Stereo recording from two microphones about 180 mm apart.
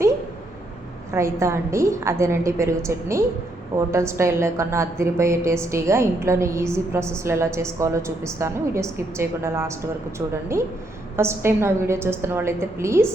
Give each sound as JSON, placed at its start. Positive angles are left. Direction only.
{"t": 1.1, "sound": "a woman's voice", "side_deg": -15}